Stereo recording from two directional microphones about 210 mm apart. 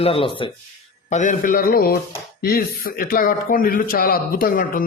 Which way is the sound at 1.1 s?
35° left (ahead or behind).